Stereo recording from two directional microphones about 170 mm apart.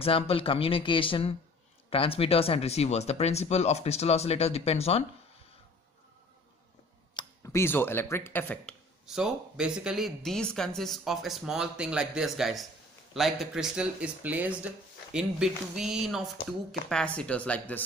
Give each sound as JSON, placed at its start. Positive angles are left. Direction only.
{"t": 0.0, "sound": "speech", "side_deg": 35}
{"t": 7.2, "sound": "speech", "side_deg": 15}
{"t": 9.0, "sound": "a woman's voice", "side_deg": -5}